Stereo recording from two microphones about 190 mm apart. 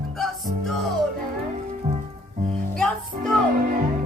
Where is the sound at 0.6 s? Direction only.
Centre (ahead or behind).